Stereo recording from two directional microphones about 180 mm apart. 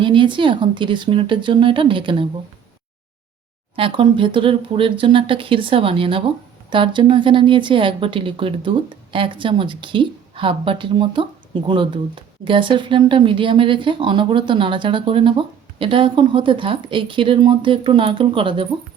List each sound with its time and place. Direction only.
0.0 s speech: 25° right (ahead or behind)
3.8 s speech: 30° right (ahead or behind)